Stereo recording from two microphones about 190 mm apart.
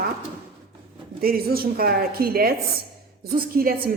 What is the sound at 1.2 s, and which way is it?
A woman's voice, 50° right (ahead or behind).